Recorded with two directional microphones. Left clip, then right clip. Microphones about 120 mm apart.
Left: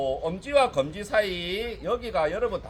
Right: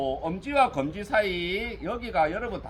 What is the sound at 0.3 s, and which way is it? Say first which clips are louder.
Speech: left 1 dB; 20° left (ahead or behind).